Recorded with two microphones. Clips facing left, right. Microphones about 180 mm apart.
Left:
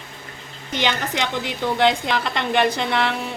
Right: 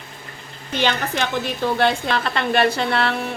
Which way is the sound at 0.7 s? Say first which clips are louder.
Right 2 dB; 15° left (ahead or behind).